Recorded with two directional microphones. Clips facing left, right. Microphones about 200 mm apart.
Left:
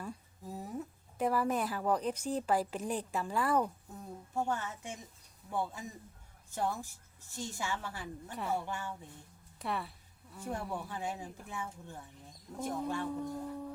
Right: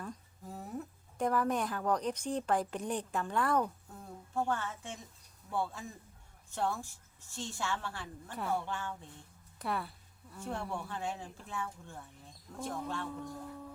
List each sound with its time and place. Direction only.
0.0 s a woman's voice: 10° left (ahead or behind)
8.3 s speech: centre (ahead or behind); by 13.4 s 20° left (ahead or behind)